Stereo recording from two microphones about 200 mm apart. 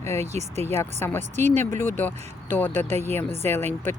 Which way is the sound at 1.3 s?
35° right (ahead or behind).